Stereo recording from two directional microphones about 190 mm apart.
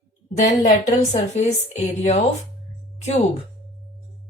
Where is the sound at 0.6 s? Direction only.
40° left (ahead or behind).